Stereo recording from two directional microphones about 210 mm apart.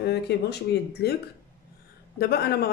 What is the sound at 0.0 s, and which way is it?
A woman's voice, 50° left (ahead or behind).